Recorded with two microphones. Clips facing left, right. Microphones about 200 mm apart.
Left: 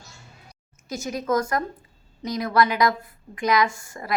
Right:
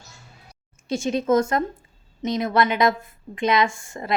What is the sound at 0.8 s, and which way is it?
A woman's voice, 30° right (ahead or behind).